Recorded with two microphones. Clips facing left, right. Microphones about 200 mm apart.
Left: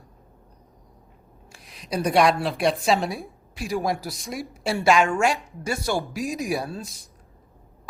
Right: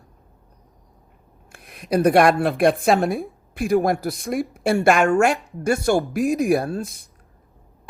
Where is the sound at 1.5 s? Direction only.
55° right (ahead or behind).